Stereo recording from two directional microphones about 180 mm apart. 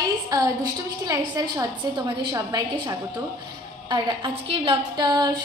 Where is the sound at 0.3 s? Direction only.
20° right (ahead or behind).